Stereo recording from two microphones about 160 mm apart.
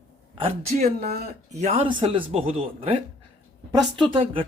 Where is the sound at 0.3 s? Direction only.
40° right (ahead or behind).